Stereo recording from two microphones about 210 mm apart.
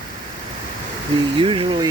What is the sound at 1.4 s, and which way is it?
Speech, 25° right (ahead or behind).